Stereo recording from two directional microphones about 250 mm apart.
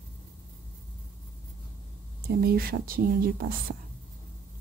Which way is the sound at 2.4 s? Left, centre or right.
Right.